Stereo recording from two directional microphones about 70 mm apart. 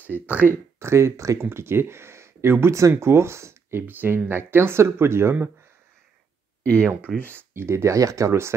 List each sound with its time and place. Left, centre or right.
0.0 s speech: right
0.7 s speech: right
3.8 s speech: right
6.6 s speech: centre
7.2 s speech: right